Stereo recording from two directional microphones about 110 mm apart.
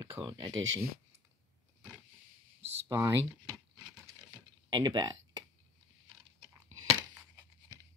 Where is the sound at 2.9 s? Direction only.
25° right (ahead or behind).